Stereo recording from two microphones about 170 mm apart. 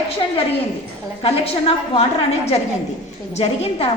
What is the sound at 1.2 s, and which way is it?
A woman's voice, 35° left (ahead or behind).